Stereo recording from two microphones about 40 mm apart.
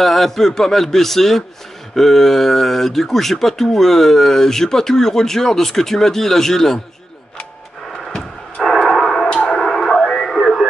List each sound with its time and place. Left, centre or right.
0.0 s speech: centre
7.9 s a sound: centre
9.5 s radio: centre